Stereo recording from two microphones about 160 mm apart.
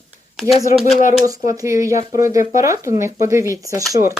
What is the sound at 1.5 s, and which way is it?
Speech, 20° right (ahead or behind).